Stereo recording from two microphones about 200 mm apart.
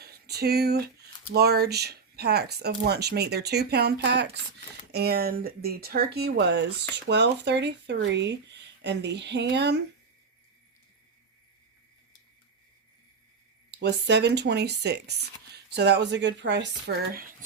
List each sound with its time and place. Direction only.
0.0 s a sound: 50° right (ahead or behind)
1.3 s speech: 55° right (ahead or behind)
13.7 s speech: 60° right (ahead or behind)